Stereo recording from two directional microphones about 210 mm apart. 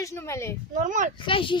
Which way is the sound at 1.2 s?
25° left (ahead or behind).